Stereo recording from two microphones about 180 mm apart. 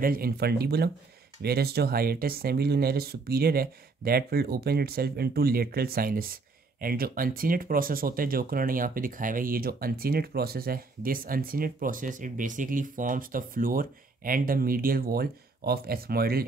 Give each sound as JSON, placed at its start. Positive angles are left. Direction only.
{"t": 0.0, "sound": "speech", "side_deg": -55}